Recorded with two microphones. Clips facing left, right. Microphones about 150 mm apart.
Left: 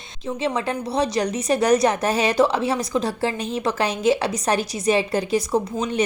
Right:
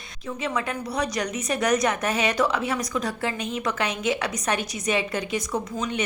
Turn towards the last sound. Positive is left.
turn(degrees=30)  # may be behind; listen again after turning